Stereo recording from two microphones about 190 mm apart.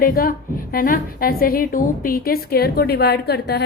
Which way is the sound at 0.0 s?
50° left (ahead or behind).